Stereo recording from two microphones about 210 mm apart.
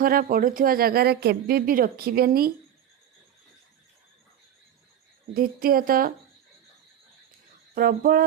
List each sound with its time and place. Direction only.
0.0 s speech: 45° right (ahead or behind)
5.3 s speech: 45° right (ahead or behind)
7.8 s speech: 45° right (ahead or behind)